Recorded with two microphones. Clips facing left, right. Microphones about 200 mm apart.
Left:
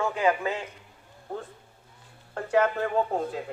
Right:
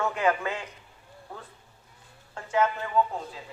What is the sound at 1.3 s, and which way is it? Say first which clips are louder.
Speech: left 8 dB; 45° left (ahead or behind).